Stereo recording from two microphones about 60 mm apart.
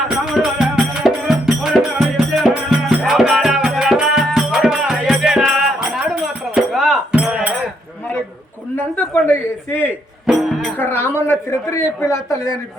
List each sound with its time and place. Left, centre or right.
0.3 s music: centre
6.2 s music: centre
7.1 s a sound: centre
8.7 s a sound: left
10.2 s music: centre
10.8 s a man's voice: left